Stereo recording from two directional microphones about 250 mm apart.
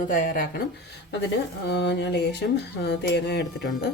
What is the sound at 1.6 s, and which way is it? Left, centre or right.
Speech, left.